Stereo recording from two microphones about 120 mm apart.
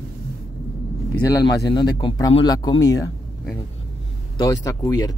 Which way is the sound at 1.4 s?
35° left (ahead or behind).